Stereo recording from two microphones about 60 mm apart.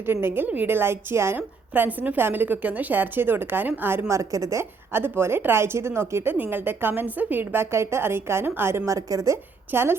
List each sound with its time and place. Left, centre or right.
0.0 s a woman's voice: right
0.4 s a woman's voice: right
0.7 s a woman's voice: right
1.4 s a woman's voice: right
4.1 s a woman's voice: right
4.9 s a woman's voice: right
6.3 s a woman's voice: right
8.8 s a woman's voice: right
9.7 s a woman's voice: right